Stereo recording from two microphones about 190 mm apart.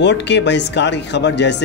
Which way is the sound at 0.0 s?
65° left (ahead or behind).